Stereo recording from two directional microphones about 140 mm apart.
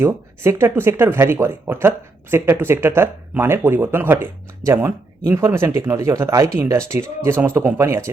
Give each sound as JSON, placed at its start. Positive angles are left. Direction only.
{"t": 0.0, "sound": "speech", "side_deg": -20}